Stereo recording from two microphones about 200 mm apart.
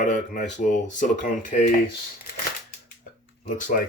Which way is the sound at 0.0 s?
40° left (ahead or behind).